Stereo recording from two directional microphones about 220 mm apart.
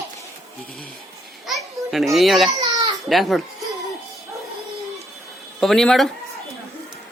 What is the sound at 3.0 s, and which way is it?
Speech, centre (ahead or behind).